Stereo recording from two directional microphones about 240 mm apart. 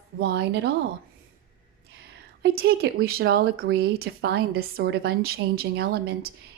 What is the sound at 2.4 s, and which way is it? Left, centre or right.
A woman's voice, right.